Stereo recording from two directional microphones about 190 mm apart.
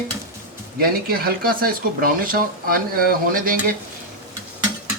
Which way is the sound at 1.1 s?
50° right (ahead or behind).